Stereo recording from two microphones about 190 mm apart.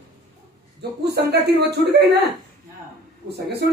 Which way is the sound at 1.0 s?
60° right (ahead or behind).